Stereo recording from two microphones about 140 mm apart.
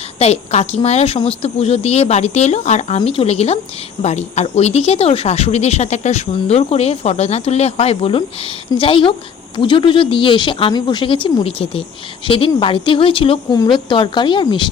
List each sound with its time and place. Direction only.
0.2 s speech: 50° left (ahead or behind)